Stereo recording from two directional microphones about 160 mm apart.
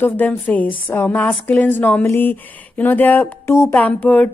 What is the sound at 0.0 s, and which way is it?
A woman's voice, 10° left (ahead or behind).